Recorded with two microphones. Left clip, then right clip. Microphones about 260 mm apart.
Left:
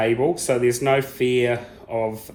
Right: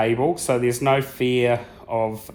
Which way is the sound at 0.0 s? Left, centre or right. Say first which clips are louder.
Even; right.